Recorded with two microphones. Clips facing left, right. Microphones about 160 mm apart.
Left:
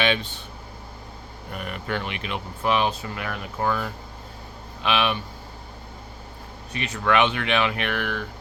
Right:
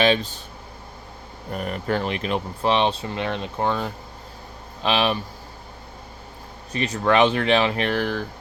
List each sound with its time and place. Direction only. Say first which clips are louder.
0.0 s a sound: right 4 dB; 35° right (ahead or behind)
1.5 s speech: right 5 dB; 35° right (ahead or behind)
6.7 s speech: right 3 dB; 35° right (ahead or behind)